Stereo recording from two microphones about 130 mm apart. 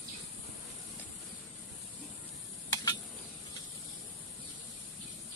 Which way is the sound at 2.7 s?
30° left (ahead or behind).